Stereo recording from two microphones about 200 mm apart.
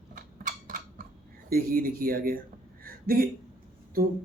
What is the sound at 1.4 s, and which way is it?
Speech, 45° right (ahead or behind).